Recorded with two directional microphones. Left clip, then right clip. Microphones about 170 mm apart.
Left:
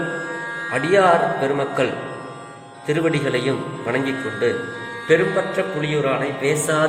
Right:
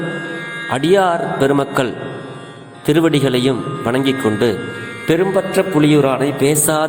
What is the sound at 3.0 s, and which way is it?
A man's voice, 50° right (ahead or behind).